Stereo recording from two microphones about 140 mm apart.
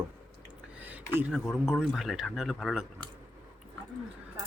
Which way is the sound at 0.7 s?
10° right (ahead or behind).